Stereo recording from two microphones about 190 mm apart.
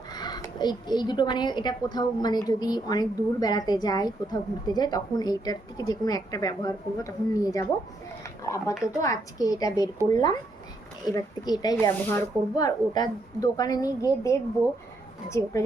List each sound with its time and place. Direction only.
0.1 s a woman's voice: 20° left (ahead or behind)
8.2 s a sound: 15° left (ahead or behind)
9.0 s a woman's voice: 20° left (ahead or behind)